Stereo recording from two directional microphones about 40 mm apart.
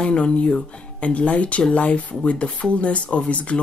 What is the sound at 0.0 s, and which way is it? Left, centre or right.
Speech, left.